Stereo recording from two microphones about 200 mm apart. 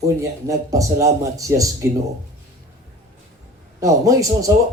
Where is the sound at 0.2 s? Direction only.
15° right (ahead or behind).